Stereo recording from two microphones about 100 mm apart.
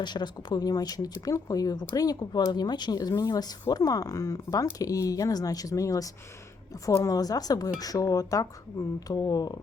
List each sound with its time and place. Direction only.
0.0 s speech: 45° left (ahead or behind)